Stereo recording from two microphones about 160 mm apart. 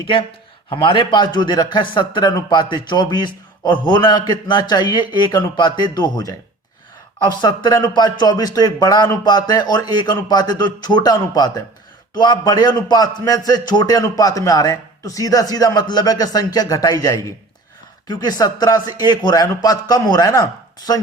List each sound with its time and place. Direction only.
0.0 s speech: 30° left (ahead or behind)